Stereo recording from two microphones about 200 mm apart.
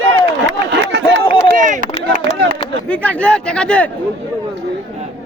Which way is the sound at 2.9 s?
10° left (ahead or behind).